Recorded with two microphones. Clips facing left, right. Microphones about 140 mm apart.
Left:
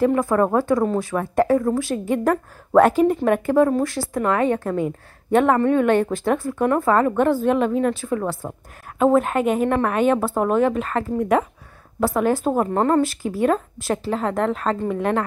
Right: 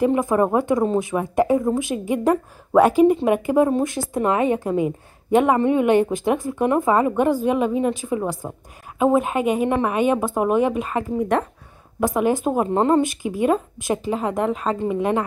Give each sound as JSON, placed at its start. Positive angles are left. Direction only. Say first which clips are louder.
{"t": 0.0, "sound": "a woman's voice", "louder": "even", "side_deg": -15}
{"t": 11.1, "sound": "speech", "louder": "left 2 dB", "side_deg": 5}
{"t": 12.0, "sound": "a woman's voice", "louder": "even", "side_deg": -15}